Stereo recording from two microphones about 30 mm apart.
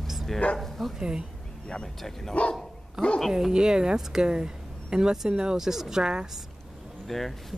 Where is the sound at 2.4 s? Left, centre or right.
Left.